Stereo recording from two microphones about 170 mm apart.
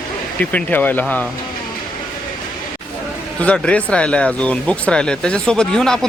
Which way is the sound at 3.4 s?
5° left (ahead or behind).